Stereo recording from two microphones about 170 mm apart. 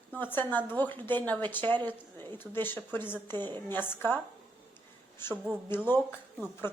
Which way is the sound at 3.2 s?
25° right (ahead or behind).